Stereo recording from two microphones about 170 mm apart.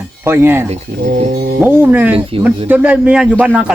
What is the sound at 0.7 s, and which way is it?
Speech, 45° right (ahead or behind).